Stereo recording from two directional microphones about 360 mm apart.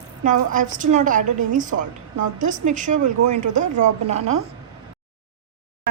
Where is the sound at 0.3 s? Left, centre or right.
Right.